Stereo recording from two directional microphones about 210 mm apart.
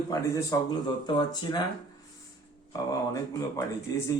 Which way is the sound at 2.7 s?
15° left (ahead or behind).